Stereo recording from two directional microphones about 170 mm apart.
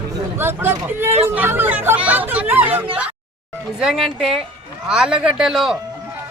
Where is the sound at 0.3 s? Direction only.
15° right (ahead or behind).